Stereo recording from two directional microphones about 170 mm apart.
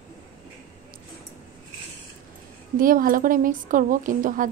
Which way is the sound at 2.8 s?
55° right (ahead or behind).